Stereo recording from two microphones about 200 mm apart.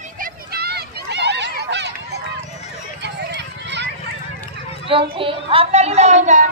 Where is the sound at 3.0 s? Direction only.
60° right (ahead or behind).